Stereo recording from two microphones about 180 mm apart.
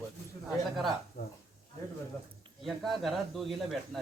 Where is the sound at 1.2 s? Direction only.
55° left (ahead or behind).